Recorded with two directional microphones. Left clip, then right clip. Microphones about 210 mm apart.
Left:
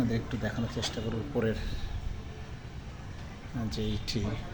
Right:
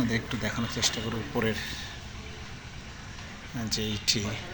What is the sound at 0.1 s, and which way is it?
Speech, 5° right (ahead or behind).